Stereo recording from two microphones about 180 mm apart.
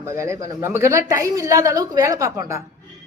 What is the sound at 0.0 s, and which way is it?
Speech, 15° right (ahead or behind).